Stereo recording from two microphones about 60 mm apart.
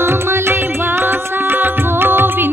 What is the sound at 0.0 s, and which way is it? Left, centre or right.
Music, right.